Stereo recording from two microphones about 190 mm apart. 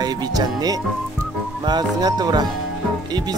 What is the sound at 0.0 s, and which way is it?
Speech, 20° right (ahead or behind).